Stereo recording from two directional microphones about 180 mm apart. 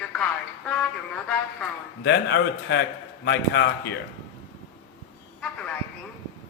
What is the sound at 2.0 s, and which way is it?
Speech, 70° left (ahead or behind).